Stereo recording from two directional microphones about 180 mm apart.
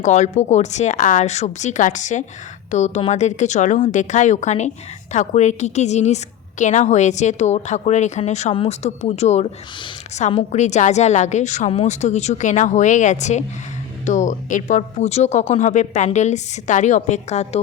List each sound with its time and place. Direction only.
0.0 s a woman's voice: 40° left (ahead or behind)